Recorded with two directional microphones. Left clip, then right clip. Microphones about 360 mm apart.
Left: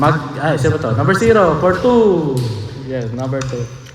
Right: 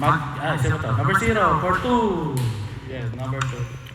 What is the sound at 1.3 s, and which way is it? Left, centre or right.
Speech, left.